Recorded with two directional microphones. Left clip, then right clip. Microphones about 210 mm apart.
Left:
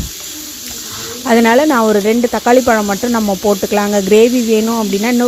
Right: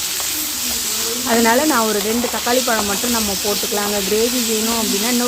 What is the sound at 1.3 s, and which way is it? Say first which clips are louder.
Speech: left 6 dB; 40° left (ahead or behind).